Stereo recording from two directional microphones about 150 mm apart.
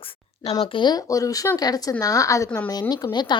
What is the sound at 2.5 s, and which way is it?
Speech, 10° left (ahead or behind).